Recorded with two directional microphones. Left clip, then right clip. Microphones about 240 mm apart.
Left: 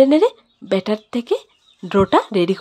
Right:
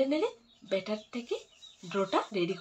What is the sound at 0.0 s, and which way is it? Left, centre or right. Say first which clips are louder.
Speech: left 17 dB; left.